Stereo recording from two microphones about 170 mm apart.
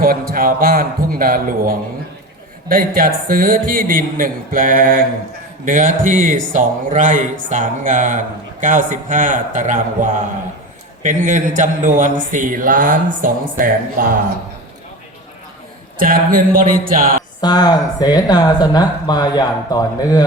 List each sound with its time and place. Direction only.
0.0 s a man's voice: 60° right (ahead or behind)
16.0 s a man's voice: 55° right (ahead or behind)
17.4 s speech: 25° left (ahead or behind)